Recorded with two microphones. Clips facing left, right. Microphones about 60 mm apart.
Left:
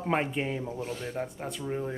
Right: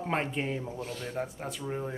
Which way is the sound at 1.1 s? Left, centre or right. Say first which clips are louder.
Left 1 dB; centre.